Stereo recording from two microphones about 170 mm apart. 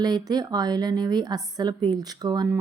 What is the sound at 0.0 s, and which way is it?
A woman's voice, 25° right (ahead or behind).